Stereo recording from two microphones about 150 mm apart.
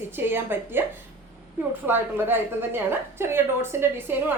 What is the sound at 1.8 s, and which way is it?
A woman's voice, 15° right (ahead or behind).